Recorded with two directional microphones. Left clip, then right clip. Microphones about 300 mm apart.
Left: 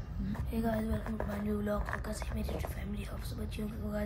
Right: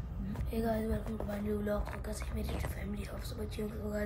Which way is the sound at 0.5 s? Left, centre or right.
Centre.